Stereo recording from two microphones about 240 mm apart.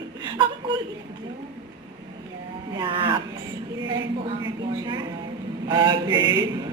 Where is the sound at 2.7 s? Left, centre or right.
Right.